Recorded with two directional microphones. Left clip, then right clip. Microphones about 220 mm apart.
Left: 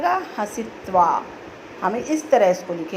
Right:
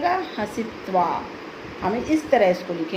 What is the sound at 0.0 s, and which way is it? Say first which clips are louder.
A woman's voice: left 2 dB; 15° left (ahead or behind).